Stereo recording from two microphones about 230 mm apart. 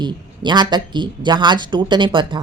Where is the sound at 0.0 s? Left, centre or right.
Centre.